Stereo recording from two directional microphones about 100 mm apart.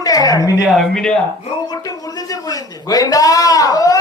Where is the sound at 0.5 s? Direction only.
10° right (ahead or behind).